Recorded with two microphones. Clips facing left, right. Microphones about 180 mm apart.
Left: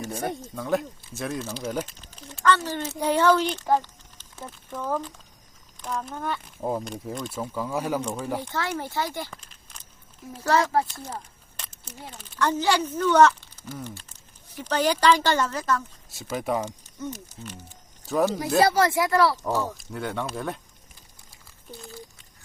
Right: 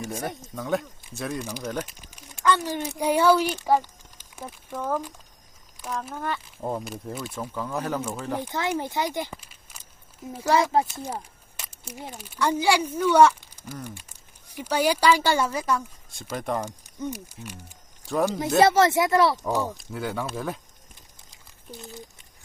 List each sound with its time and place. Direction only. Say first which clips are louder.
0.2 s speech: left 2 dB; centre (ahead or behind)
1.9 s speech: left 4 dB; 10° right (ahead or behind)
7.5 s speech: left 2 dB; 10° left (ahead or behind)
8.4 s speech: right 2 dB; 20° right (ahead or behind)
9.4 s a sound: even; 10° right (ahead or behind)
10.3 s speech: right 1 dB; 10° right (ahead or behind)
16.3 s speech: left 2 dB; 5° left (ahead or behind)
16.6 s speech: right 2 dB; 10° right (ahead or behind)
18.0 s speech: left 1 dB; centre (ahead or behind)
18.3 s speech: right 4 dB; 20° right (ahead or behind)
19.7 s speech: even; centre (ahead or behind)
21.2 s a sound: even; 20° right (ahead or behind)